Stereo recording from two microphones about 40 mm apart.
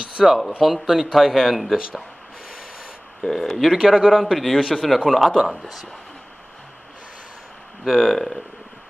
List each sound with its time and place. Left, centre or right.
0.2 s speech: centre
3.3 s speech: centre
3.7 s speech: centre
4.6 s speech: left
4.8 s speech: centre
7.8 s speech: centre